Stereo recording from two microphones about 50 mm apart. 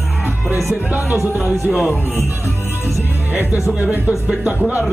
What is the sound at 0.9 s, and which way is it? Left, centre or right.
Speech, right.